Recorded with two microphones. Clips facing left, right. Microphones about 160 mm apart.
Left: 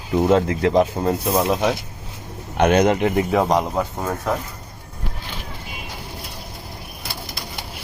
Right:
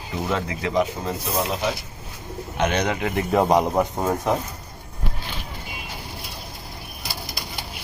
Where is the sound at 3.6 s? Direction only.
15° right (ahead or behind).